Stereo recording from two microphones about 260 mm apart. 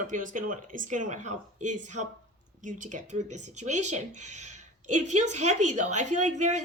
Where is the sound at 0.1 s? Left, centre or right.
Right.